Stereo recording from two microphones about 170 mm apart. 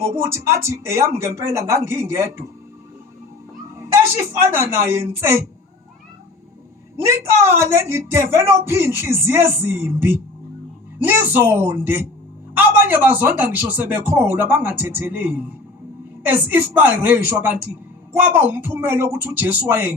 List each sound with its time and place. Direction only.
0.0 s speech: 15° right (ahead or behind)
3.8 s a woman's voice: 15° right (ahead or behind)
7.5 s speech: 15° right (ahead or behind)